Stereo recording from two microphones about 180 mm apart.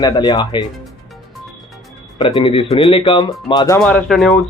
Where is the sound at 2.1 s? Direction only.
25° left (ahead or behind).